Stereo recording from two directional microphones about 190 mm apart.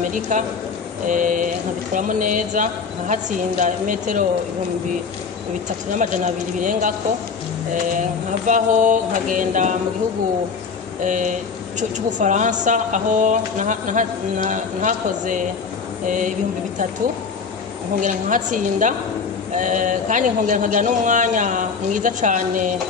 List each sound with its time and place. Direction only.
0.3 s speech: 40° right (ahead or behind)
5.9 s speech: 40° right (ahead or behind)
8.5 s speech: 40° right (ahead or behind)
11.0 s speech: 40° right (ahead or behind)
18.0 s speech: 40° right (ahead or behind)